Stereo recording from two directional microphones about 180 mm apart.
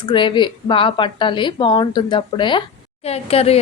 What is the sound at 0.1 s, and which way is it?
A woman's voice, 25° left (ahead or behind).